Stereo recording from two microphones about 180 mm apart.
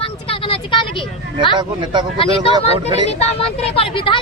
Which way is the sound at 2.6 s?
35° left (ahead or behind).